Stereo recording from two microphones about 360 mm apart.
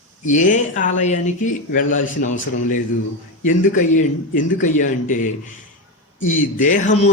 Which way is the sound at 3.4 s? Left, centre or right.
Left.